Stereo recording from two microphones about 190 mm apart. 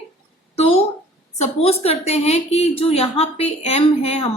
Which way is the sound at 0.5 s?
35° left (ahead or behind).